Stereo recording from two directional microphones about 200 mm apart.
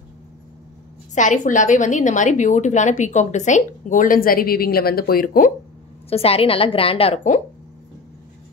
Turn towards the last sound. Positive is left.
turn(degrees=35)  # may be behind; listen again after turning